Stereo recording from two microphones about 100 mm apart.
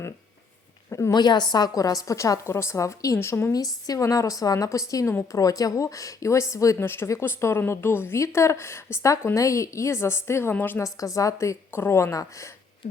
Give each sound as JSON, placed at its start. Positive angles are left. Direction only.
{"t": 0.9, "sound": "a sound", "side_deg": 30}
{"t": 1.1, "sound": "a woman's voice", "side_deg": 45}
{"t": 3.5, "sound": "a woman's voice", "side_deg": 35}
{"t": 10.8, "sound": "a woman's voice", "side_deg": 35}